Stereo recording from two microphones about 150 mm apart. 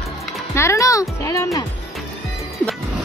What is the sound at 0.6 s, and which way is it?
Speech, 20° left (ahead or behind).